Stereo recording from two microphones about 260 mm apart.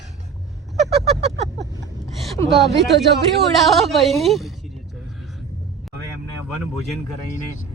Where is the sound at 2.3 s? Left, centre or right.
Centre.